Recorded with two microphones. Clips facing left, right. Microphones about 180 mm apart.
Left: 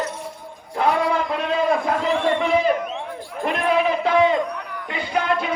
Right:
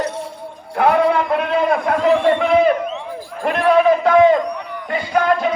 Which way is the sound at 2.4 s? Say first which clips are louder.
Right 5 dB; 55° right (ahead or behind).